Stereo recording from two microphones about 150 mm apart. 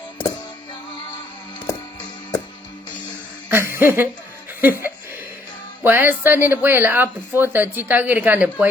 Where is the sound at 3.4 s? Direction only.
15° right (ahead or behind).